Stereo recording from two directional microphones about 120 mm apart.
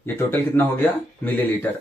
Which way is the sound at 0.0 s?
20° left (ahead or behind).